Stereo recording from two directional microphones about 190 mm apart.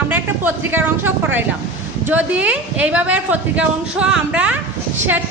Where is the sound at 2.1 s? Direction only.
5° right (ahead or behind).